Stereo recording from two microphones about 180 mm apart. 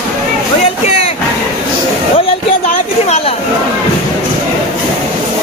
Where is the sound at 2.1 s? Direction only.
30° left (ahead or behind).